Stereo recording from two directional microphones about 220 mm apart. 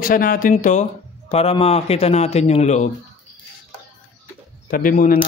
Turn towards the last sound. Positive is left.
turn(degrees=35)  # may be behind; listen again after turning